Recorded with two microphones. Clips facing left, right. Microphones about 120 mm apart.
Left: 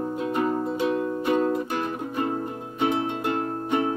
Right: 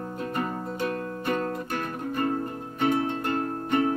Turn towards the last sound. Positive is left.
turn(degrees=15)  # may be behind; listen again after turning